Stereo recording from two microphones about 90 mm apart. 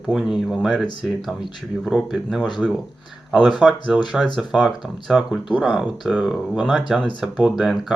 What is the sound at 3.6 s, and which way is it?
Speech, 10° right (ahead or behind).